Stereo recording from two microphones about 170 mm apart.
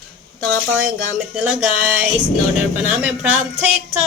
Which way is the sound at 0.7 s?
5° right (ahead or behind).